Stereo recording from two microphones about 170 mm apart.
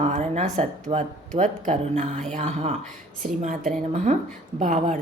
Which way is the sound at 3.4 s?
55° right (ahead or behind).